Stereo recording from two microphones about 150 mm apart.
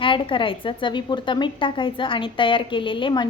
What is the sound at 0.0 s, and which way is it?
A woman's voice, 35° left (ahead or behind).